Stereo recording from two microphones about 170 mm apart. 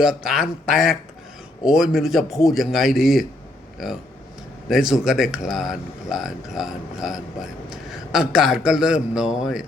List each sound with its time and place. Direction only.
0.0 s speech: 5° right (ahead or behind)
4.7 s speech: 5° right (ahead or behind)